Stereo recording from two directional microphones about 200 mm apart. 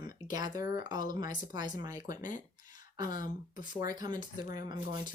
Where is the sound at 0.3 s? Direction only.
20° right (ahead or behind).